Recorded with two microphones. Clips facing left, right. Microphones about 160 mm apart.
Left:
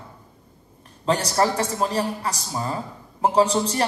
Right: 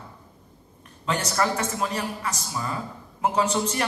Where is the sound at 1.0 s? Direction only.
35° left (ahead or behind).